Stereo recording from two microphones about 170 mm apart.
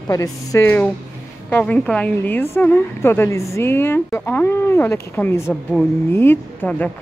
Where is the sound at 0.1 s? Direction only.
20° left (ahead or behind).